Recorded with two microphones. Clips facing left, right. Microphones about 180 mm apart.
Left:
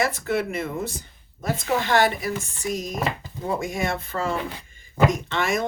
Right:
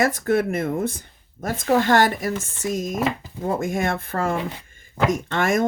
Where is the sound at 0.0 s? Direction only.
45° right (ahead or behind).